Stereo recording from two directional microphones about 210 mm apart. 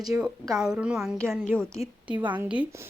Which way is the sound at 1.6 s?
15° right (ahead or behind).